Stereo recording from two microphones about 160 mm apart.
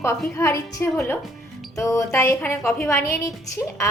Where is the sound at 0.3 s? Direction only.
20° left (ahead or behind).